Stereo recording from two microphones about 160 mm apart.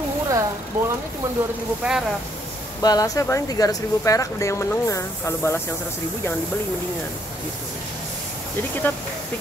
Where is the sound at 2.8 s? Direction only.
20° left (ahead or behind).